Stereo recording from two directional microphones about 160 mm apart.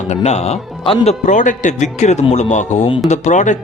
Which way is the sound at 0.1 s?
45° left (ahead or behind).